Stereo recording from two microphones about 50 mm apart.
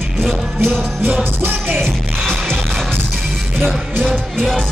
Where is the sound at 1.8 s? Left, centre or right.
Centre.